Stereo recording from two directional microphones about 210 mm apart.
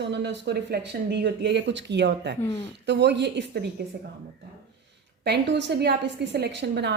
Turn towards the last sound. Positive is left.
turn(degrees=-55)  # may be behind; listen again after turning